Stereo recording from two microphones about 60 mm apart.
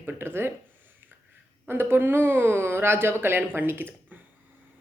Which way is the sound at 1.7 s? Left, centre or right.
Right.